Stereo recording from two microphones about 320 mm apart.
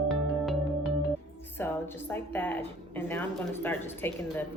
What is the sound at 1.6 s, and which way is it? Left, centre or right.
Speech, centre.